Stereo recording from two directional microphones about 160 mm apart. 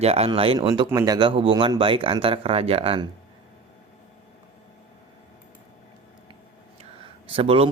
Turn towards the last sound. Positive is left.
turn(degrees=-35)  # may be behind; listen again after turning